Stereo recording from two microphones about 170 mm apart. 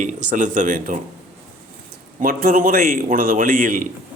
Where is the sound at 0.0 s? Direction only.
50° right (ahead or behind).